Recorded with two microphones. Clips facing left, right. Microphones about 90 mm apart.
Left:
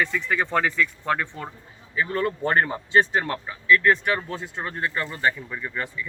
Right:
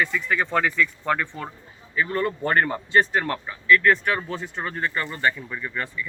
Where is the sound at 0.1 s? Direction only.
25° left (ahead or behind).